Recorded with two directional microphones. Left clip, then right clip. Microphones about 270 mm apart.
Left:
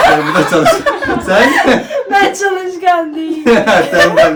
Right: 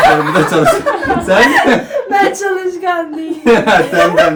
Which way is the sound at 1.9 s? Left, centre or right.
Centre.